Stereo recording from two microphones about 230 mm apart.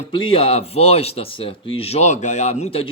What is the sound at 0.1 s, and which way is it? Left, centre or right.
Speech, left.